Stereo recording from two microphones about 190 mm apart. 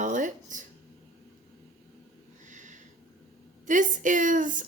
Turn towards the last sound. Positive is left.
turn(degrees=-45)  # may be behind; listen again after turning